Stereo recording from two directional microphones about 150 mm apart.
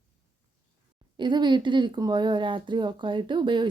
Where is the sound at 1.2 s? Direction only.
30° right (ahead or behind).